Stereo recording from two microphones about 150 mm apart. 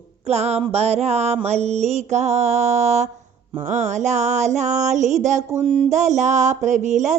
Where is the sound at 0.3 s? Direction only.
45° right (ahead or behind).